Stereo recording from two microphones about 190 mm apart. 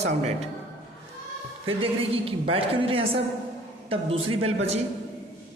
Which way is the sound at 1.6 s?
30° right (ahead or behind).